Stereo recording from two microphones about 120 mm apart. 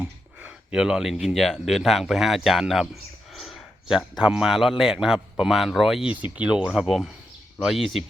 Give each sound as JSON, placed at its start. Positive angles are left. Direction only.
{"t": 0.0, "sound": "speech", "side_deg": -10}